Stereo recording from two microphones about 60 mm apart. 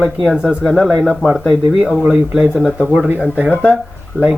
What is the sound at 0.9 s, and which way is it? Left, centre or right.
Speech, centre.